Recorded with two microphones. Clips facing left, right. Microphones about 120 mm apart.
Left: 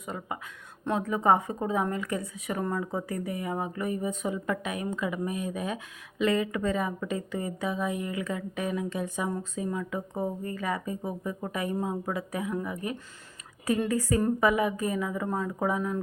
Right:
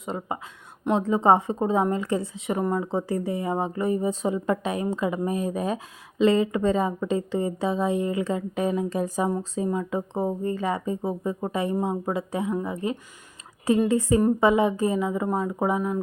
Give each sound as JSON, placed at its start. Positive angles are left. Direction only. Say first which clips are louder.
{"t": 0.0, "sound": "a woman's voice", "louder": "right 5 dB", "side_deg": -25}